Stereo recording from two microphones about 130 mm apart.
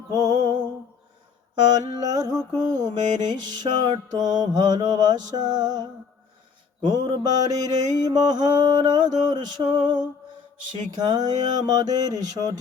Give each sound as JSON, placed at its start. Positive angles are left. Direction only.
{"t": 0.1, "sound": "music", "side_deg": -30}
{"t": 1.8, "sound": "mantra", "side_deg": -30}
{"t": 6.8, "sound": "mantra", "side_deg": -35}